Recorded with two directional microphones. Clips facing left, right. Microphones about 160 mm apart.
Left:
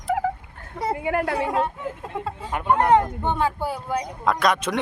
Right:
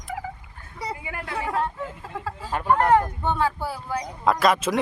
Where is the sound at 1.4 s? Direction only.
20° left (ahead or behind).